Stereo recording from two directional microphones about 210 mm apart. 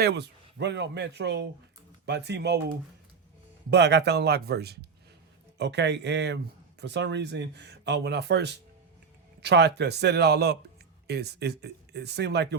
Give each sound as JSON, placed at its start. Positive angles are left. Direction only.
{"t": 0.0, "sound": "speech", "side_deg": -50}
{"t": 3.7, "sound": "speech", "side_deg": -55}